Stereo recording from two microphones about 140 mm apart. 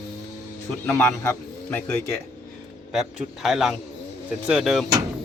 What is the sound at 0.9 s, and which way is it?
Speech, 15° left (ahead or behind).